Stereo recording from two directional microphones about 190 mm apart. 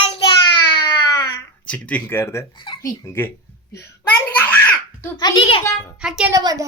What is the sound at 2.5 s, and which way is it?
Speech, 25° left (ahead or behind).